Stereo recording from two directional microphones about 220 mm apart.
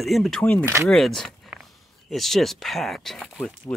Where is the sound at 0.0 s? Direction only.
Centre (ahead or behind).